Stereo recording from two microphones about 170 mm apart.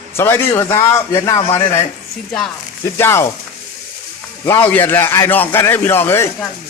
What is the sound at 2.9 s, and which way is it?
Speech, 15° left (ahead or behind).